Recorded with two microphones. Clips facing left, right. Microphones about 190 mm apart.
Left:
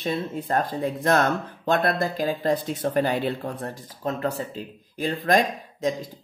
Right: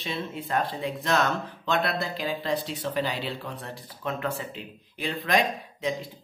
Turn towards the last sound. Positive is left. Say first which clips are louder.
# left 4 dB
turn(degrees=45)  # may be behind; listen again after turning